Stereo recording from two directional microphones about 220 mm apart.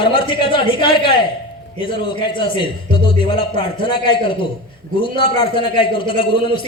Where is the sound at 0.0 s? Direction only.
20° left (ahead or behind).